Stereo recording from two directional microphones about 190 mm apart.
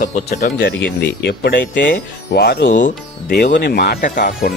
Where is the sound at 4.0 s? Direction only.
45° left (ahead or behind).